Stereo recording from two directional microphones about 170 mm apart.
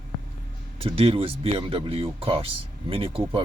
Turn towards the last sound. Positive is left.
turn(degrees=-30)  # may be behind; listen again after turning